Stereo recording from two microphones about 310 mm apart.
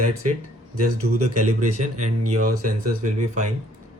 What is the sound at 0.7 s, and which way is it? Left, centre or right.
Speech, right.